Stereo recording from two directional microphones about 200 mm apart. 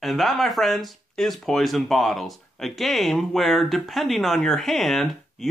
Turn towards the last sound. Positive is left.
turn(degrees=0)  # may be behind; listen again after turning